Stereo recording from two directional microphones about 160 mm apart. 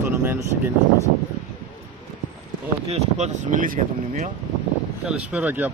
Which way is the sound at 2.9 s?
45° right (ahead or behind).